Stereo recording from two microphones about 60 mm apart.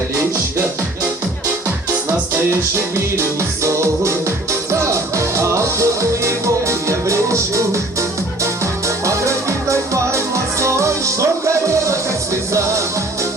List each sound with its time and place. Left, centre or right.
2.3 s music: right